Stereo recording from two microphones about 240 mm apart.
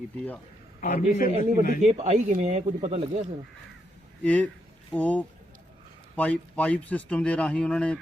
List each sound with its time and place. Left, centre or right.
0.8 s a man's voice: left
1.9 s speech: right
4.2 s a man's voice: centre